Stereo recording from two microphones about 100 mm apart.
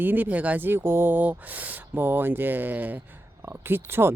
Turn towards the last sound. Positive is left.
turn(degrees=-25)  # may be behind; listen again after turning